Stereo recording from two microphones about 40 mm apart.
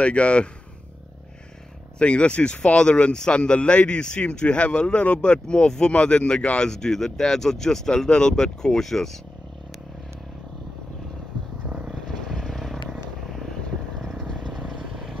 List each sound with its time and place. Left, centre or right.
0.0 s a man's voice: left
2.0 s a man's voice: left
6.7 s speech: centre
11.6 s vehicle: right
11.9 s vehicle: centre
13.9 s vehicle: centre